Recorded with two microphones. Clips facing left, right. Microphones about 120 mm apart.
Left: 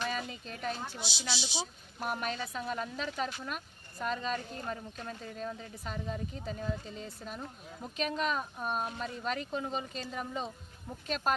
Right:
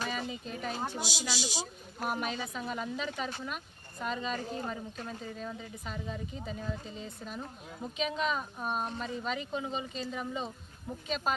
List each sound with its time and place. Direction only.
0.0 s a sound: 5° right (ahead or behind)
0.9 s speech: 45° right (ahead or behind)
2.0 s speech: 5° right (ahead or behind)